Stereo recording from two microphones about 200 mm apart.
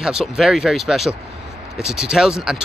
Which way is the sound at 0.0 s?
Centre (ahead or behind).